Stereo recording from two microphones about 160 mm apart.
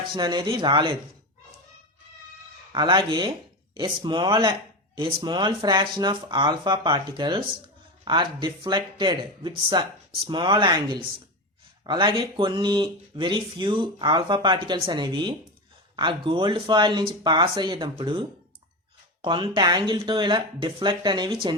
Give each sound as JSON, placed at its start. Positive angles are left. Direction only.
{"t": 0.2, "sound": "speech", "side_deg": -25}
{"t": 2.7, "sound": "speech", "side_deg": -30}